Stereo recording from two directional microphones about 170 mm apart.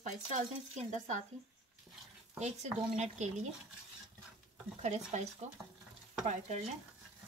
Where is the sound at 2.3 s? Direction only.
40° right (ahead or behind).